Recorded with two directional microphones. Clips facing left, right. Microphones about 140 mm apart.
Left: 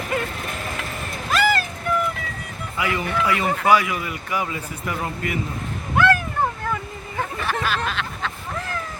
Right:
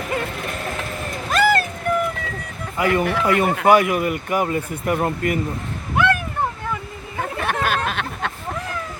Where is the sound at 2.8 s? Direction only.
50° right (ahead or behind).